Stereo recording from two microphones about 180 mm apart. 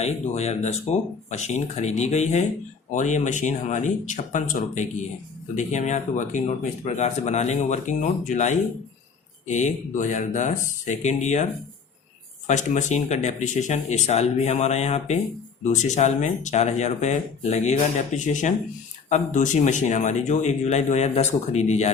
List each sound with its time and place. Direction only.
0.0 s speech: 35° left (ahead or behind)
12.5 s speech: 40° left (ahead or behind)